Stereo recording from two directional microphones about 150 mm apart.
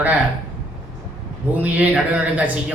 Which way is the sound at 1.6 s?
10° right (ahead or behind).